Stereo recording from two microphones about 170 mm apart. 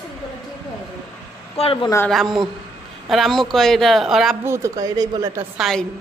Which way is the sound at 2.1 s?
Centre (ahead or behind).